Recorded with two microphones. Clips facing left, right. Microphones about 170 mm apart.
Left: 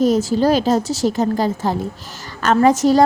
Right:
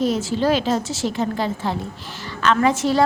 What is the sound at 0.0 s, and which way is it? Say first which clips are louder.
A woman's voice: left 5 dB; 40° left (ahead or behind).